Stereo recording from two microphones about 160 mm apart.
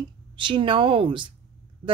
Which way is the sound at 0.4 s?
30° right (ahead or behind).